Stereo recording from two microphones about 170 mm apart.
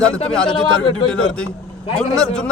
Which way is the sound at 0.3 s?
5° left (ahead or behind).